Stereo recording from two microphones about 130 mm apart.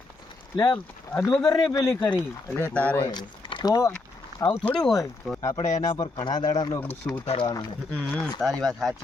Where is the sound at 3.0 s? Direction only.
35° left (ahead or behind).